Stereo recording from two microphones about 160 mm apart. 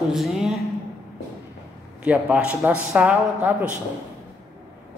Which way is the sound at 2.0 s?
10° right (ahead or behind).